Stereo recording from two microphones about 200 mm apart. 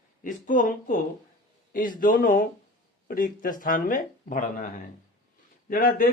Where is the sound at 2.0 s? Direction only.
45° left (ahead or behind).